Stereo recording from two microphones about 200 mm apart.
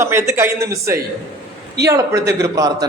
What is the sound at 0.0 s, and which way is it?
A man's voice, 15° right (ahead or behind).